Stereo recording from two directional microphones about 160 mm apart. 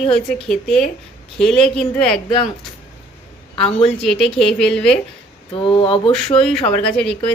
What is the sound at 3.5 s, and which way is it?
Speech, 35° left (ahead or behind).